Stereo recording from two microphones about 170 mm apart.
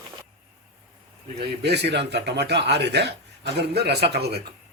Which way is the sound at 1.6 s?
80° right.